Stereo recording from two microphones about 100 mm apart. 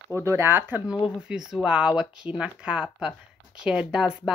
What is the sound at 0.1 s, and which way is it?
Speech, 30° right (ahead or behind).